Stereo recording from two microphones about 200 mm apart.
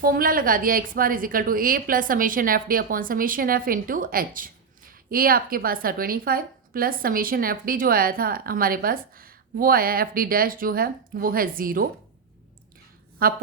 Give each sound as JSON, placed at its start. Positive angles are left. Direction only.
{"t": 0.0, "sound": "a woman's voice", "side_deg": -45}
{"t": 13.2, "sound": "a woman's voice", "side_deg": -45}